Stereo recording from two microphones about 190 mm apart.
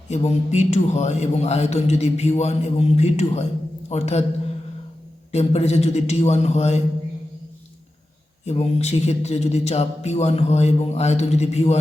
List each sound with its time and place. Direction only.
0.1 s a man's voice: 35° left (ahead or behind)
5.3 s a man's voice: 35° left (ahead or behind)
8.4 s a man's voice: 35° left (ahead or behind)